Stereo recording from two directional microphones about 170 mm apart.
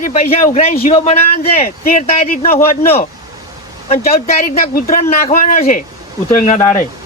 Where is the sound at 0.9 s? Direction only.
40° left (ahead or behind).